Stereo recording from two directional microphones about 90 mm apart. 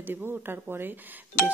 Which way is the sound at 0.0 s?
25° right (ahead or behind).